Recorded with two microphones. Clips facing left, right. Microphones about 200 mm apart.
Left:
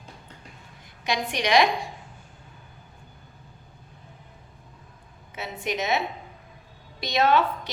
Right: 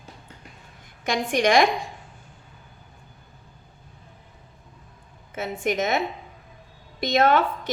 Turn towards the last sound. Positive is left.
turn(degrees=-50)  # may be behind; listen again after turning